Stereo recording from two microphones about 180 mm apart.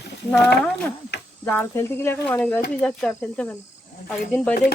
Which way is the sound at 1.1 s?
70° left (ahead or behind).